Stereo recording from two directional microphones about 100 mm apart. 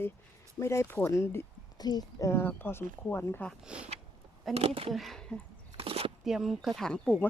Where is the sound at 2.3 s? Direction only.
20° left (ahead or behind).